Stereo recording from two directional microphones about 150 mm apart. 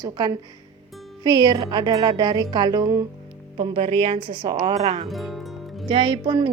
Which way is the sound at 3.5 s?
40° right (ahead or behind).